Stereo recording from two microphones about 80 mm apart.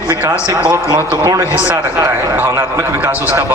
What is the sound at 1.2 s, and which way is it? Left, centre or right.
A man's voice, right.